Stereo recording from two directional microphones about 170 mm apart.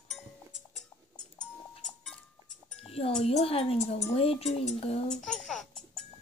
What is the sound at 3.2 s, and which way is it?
A woman's voice, 35° left (ahead or behind).